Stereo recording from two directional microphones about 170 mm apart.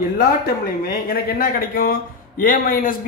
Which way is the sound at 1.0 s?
60° left (ahead or behind).